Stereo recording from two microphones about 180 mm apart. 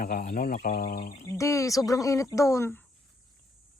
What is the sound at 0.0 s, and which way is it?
Speech, 55° left (ahead or behind).